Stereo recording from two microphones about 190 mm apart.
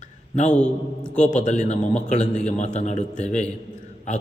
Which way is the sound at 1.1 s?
40° left (ahead or behind).